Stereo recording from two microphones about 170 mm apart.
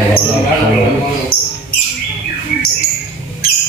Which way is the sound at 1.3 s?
60° left (ahead or behind).